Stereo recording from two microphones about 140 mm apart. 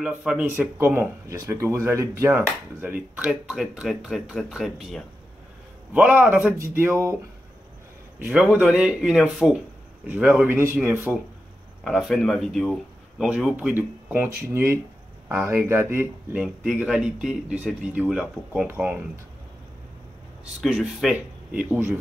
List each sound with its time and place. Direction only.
0.0 s speech: 10° right (ahead or behind)
5.9 s speech: 15° right (ahead or behind)
8.2 s speech: 10° right (ahead or behind)
11.8 s speech: centre (ahead or behind)
20.6 s speech: 5° right (ahead or behind)